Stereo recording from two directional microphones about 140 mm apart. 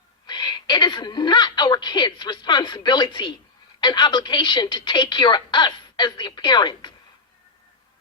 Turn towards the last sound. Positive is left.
turn(degrees=30)  # may be behind; listen again after turning